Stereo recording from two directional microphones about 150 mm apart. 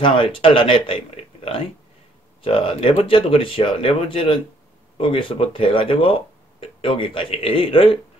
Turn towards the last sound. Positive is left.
turn(degrees=35)  # may be behind; listen again after turning